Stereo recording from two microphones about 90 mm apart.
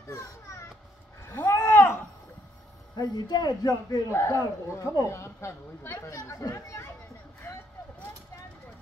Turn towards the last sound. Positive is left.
turn(degrees=35)  # may be behind; listen again after turning